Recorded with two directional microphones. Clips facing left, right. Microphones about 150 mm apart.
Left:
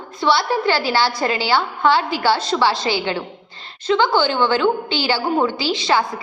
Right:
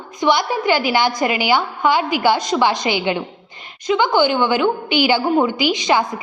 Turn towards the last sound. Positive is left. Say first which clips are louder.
# right 1 dB
turn(degrees=-15)  # may be behind; listen again after turning